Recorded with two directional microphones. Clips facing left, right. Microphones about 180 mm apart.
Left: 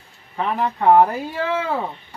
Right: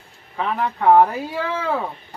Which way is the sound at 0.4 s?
5° left (ahead or behind).